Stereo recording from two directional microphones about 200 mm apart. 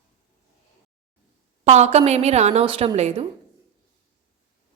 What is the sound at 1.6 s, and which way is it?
A woman's voice, 35° right (ahead or behind).